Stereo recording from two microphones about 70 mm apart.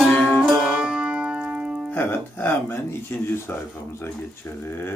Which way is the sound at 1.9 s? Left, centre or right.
Left.